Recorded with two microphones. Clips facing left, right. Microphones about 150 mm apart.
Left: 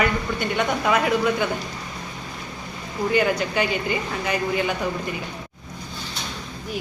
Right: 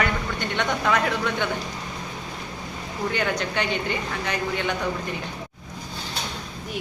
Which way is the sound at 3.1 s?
5° left (ahead or behind).